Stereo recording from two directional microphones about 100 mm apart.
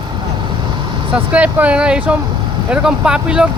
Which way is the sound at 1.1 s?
15° right (ahead or behind).